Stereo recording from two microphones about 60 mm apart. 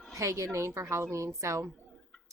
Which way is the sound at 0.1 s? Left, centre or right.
Right.